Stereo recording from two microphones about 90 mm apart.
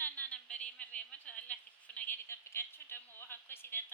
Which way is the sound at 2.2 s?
30° left (ahead or behind).